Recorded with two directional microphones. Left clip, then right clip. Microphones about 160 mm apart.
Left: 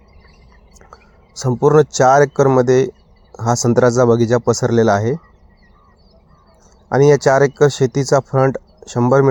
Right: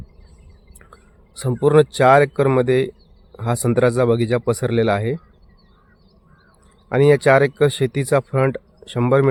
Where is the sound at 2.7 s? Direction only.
5° left (ahead or behind).